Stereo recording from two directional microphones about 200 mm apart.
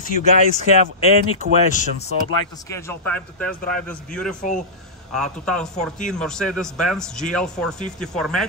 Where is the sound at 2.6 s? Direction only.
15° left (ahead or behind).